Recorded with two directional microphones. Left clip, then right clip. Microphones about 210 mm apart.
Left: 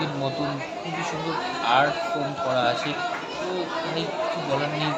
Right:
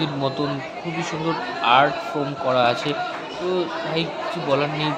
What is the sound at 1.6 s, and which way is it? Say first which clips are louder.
Speech: right 5 dB; 25° right (ahead or behind).